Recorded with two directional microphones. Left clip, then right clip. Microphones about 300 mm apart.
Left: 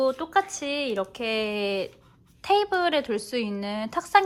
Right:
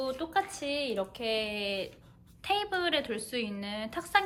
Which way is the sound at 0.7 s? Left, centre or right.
Left.